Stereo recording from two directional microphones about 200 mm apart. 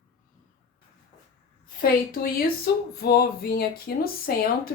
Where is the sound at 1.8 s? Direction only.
45° left (ahead or behind).